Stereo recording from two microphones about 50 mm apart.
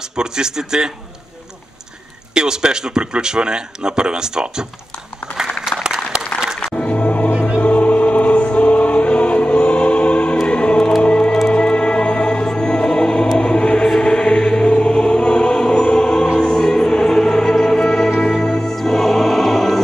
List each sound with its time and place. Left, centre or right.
0.1 s speech: centre
2.3 s speech: centre
5.9 s applause: centre
6.6 s music: left
7.3 s music: centre
7.6 s choir: left
11.0 s music: left
13.8 s choir: centre
16.3 s music: centre